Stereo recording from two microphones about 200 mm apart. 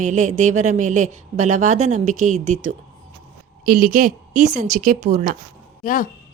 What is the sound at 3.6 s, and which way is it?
A woman's voice, 45° right (ahead or behind).